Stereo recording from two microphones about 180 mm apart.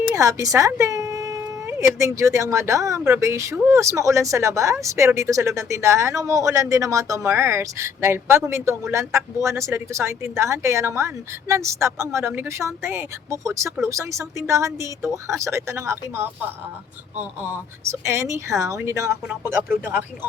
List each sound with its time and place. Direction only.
0.1 s speech: 15° right (ahead or behind)